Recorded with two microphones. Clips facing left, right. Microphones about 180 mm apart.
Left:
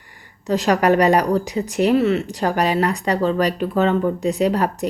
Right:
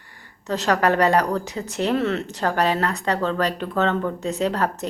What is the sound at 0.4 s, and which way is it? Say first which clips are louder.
A woman's voice: left 4 dB; 15° left (ahead or behind).